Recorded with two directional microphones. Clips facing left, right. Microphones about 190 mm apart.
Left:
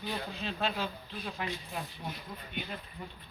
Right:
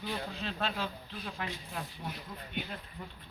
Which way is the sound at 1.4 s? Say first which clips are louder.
Left 2 dB; 5° left (ahead or behind).